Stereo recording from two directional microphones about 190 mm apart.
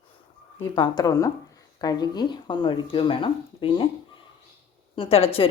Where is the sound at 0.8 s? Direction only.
20° left (ahead or behind).